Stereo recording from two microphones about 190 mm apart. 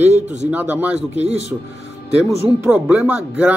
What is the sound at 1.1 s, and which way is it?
Speech, 35° right (ahead or behind).